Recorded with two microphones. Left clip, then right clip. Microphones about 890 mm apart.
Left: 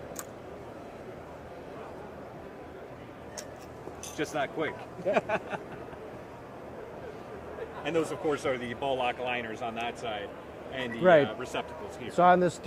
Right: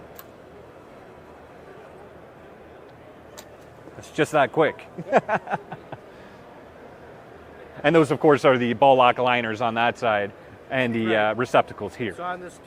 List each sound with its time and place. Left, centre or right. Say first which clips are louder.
4.2 s speech: right 12 dB; right
7.9 s speech: right 13 dB; right